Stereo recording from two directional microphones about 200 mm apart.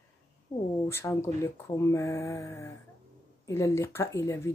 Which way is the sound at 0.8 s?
15° left (ahead or behind).